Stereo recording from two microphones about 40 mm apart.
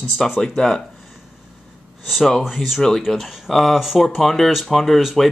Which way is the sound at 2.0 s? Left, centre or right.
Centre.